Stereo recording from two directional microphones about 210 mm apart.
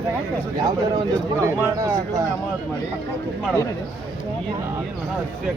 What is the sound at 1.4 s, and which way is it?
Speech, 15° right (ahead or behind).